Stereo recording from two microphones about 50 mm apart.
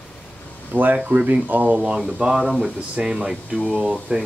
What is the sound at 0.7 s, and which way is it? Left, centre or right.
Speech, right.